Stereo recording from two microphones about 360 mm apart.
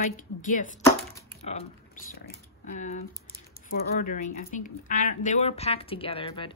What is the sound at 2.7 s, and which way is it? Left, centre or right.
A woman's voice, centre.